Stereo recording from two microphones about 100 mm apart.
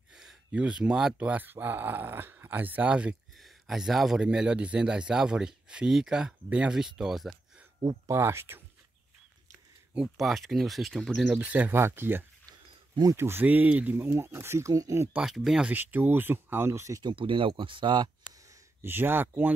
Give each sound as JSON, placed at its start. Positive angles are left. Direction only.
{"t": 0.1, "sound": "a man's voice", "side_deg": -5}
{"t": 3.3, "sound": "a man's voice", "side_deg": 0}
{"t": 8.1, "sound": "speech", "side_deg": -25}
{"t": 9.9, "sound": "speech", "side_deg": 0}
{"t": 11.3, "sound": "a man's voice", "side_deg": -15}
{"t": 12.4, "sound": "a sound", "side_deg": -40}
{"t": 13.1, "sound": "speech", "side_deg": -25}
{"t": 15.1, "sound": "speech", "side_deg": -5}
{"t": 15.7, "sound": "speech", "side_deg": -20}
{"t": 17.0, "sound": "speech", "side_deg": -60}
{"t": 18.8, "sound": "speech", "side_deg": -20}